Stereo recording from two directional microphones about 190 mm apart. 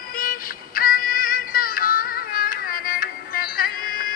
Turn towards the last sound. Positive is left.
turn(degrees=50)  # may be behind; listen again after turning